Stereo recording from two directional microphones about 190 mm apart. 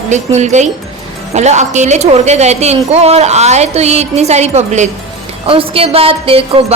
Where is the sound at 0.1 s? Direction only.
35° right (ahead or behind).